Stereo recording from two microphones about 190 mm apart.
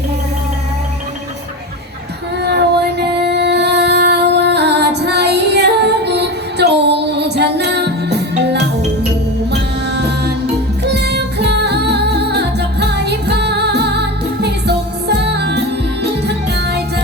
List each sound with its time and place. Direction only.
2.4 s music: 60° right (ahead or behind)
10.8 s music: 60° right (ahead or behind)